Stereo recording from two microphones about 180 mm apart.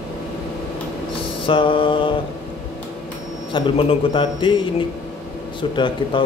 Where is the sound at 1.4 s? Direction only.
30° left (ahead or behind).